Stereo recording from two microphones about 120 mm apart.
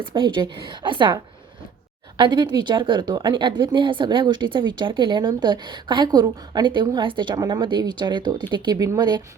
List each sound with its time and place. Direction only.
0.1 s a woman's voice: 45° right (ahead or behind)